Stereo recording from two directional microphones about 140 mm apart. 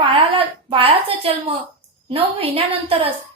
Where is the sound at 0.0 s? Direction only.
40° right (ahead or behind).